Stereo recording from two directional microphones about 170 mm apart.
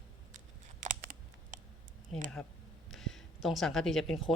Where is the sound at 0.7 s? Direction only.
50° right (ahead or behind).